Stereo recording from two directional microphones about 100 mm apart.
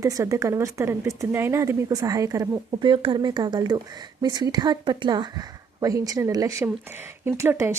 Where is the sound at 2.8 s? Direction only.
55° right (ahead or behind); by 6.6 s 35° right (ahead or behind).